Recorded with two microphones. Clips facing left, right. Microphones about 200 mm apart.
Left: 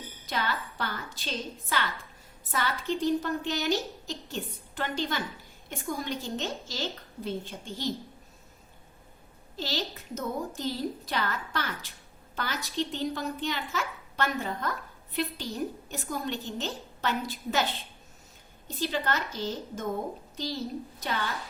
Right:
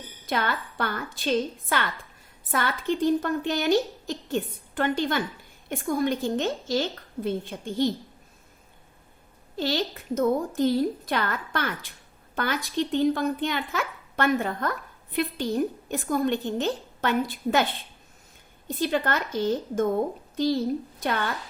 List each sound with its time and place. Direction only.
0.3 s a child's voice: 55° right (ahead or behind)
9.6 s a child's voice: 55° right (ahead or behind)
18.8 s a child's voice: 55° right (ahead or behind)